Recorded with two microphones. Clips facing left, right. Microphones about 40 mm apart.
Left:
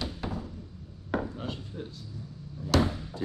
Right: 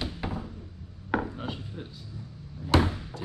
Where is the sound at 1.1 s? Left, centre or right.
Right.